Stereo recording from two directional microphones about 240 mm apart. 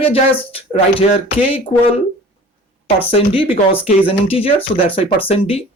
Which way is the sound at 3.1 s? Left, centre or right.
Left.